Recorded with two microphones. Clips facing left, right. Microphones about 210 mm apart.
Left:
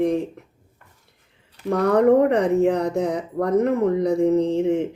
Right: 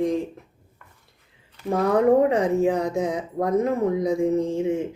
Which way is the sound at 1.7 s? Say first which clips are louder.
Left 2 dB; 65° left (ahead or behind).